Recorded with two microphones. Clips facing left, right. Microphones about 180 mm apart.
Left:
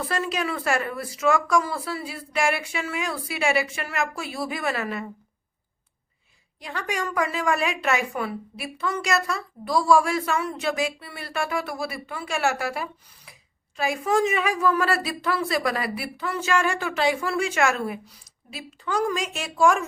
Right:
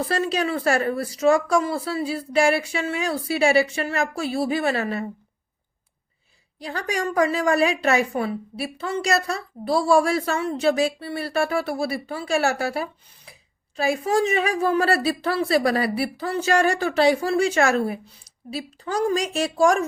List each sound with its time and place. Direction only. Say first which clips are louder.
0.0 s a woman's voice: right 4 dB; 30° right (ahead or behind)
6.6 s a woman's voice: right 3 dB; 35° right (ahead or behind)